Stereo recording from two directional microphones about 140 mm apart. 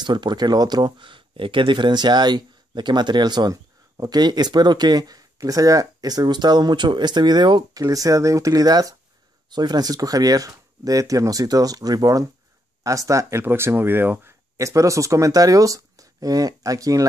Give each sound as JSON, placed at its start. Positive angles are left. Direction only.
{"t": 0.0, "sound": "speech", "side_deg": -30}